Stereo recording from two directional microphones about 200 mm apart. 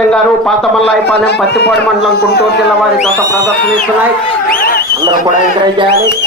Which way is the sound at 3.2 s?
15° right (ahead or behind).